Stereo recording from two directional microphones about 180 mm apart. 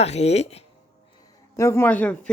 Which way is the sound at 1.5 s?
15° left (ahead or behind).